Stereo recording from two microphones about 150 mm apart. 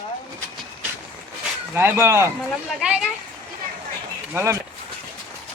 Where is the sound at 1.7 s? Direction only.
15° right (ahead or behind).